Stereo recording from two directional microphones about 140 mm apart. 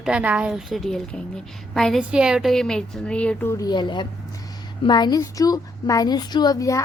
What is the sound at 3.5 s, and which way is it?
A child's voice, 25° left (ahead or behind).